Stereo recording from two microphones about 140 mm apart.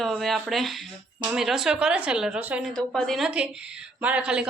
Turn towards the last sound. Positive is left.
turn(degrees=-5)  # may be behind; listen again after turning